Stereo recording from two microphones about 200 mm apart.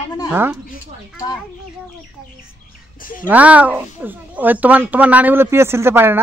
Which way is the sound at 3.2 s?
5° right (ahead or behind).